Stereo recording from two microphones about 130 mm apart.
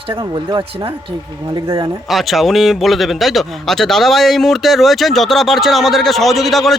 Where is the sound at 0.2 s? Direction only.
35° right (ahead or behind).